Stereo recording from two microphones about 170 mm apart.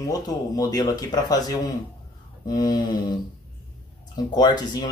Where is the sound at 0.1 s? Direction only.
20° left (ahead or behind).